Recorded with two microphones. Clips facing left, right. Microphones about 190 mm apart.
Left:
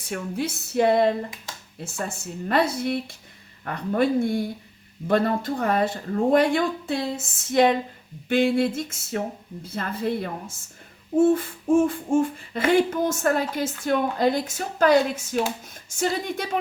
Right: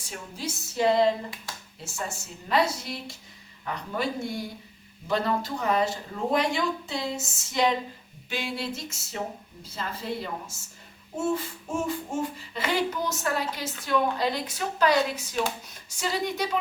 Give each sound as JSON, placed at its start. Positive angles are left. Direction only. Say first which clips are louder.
{"t": 0.0, "sound": "speech", "louder": "left 8 dB", "side_deg": 60}
{"t": 8.3, "sound": "child singing", "louder": "left 12 dB", "side_deg": 55}
{"t": 9.6, "sound": "speech", "louder": "left 6 dB", "side_deg": 55}
{"t": 11.2, "sound": "child singing", "louder": "left 9 dB", "side_deg": 55}